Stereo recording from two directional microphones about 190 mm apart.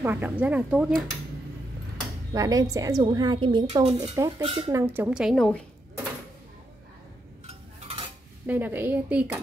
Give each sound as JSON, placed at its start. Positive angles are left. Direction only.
{"t": 0.0, "sound": "speech", "side_deg": -10}
{"t": 2.3, "sound": "a woman's voice", "side_deg": -20}
{"t": 4.7, "sound": "a woman's voice", "side_deg": -10}
{"t": 7.4, "sound": "stir", "side_deg": -30}
{"t": 8.5, "sound": "speech", "side_deg": -10}